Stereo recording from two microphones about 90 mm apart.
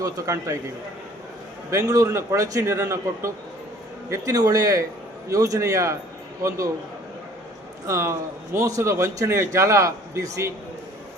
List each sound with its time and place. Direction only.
0.0 s a man's voice: 40° right (ahead or behind)
1.7 s a man's voice: 40° right (ahead or behind)
7.9 s a man's voice: 30° right (ahead or behind)